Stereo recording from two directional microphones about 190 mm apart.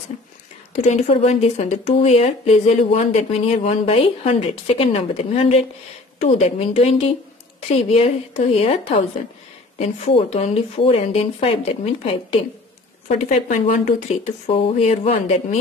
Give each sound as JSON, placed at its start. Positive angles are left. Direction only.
{"t": 0.7, "sound": "speech", "side_deg": 35}